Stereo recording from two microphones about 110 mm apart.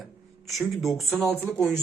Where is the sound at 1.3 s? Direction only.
20° right (ahead or behind).